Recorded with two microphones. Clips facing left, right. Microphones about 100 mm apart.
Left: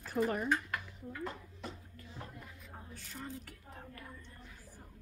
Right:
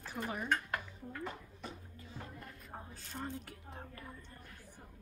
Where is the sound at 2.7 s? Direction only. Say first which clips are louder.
Right 3 dB; 30° right (ahead or behind).